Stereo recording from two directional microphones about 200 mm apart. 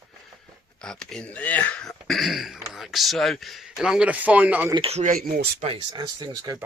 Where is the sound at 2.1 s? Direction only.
Centre (ahead or behind).